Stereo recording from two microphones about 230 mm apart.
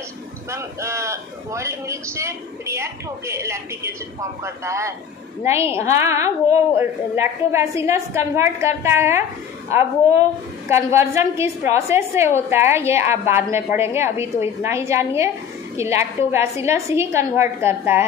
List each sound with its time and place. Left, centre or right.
0.5 s a woman's voice: centre